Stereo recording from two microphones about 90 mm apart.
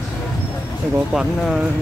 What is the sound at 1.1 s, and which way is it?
Speech, centre (ahead or behind).